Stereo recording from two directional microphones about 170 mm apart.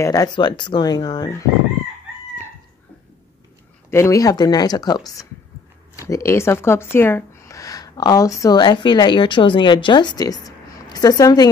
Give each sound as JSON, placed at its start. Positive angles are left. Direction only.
{"t": 0.0, "sound": "speech", "side_deg": 20}
{"t": 3.9, "sound": "speech", "side_deg": 20}